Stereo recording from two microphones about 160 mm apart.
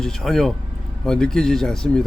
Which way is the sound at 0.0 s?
Centre (ahead or behind).